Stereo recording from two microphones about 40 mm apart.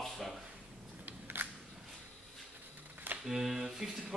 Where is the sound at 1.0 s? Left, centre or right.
Right.